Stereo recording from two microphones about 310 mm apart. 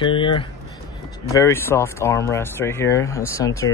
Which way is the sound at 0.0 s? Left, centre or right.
Centre.